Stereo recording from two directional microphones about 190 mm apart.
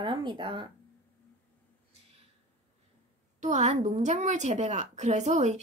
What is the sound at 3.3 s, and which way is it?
A woman's voice, 40° right (ahead or behind).